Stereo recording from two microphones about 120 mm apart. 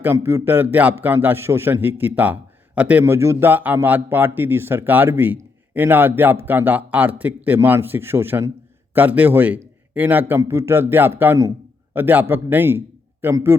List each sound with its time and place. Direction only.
0.0 s a man's voice: 20° right (ahead or behind)